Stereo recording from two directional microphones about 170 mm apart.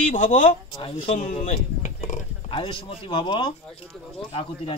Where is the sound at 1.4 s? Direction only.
45° left (ahead or behind).